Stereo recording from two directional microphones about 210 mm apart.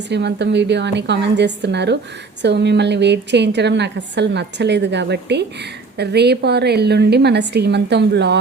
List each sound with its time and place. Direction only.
0.1 s a woman's voice: 55° right (ahead or behind)